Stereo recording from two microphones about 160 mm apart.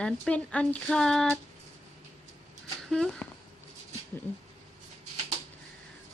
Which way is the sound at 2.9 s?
Centre (ahead or behind).